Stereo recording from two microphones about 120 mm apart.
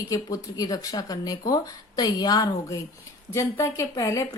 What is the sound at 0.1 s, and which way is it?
A woman's voice, 30° left (ahead or behind).